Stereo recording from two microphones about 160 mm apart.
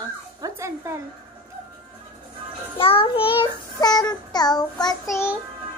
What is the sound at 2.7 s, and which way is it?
Child singing, 35° left (ahead or behind).